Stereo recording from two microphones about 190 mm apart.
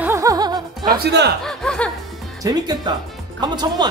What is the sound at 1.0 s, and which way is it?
Speech, 60° right (ahead or behind).